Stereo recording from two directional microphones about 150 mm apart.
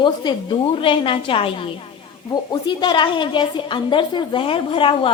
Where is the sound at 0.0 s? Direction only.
30° left (ahead or behind).